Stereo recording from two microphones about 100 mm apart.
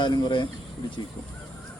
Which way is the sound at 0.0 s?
50° left (ahead or behind).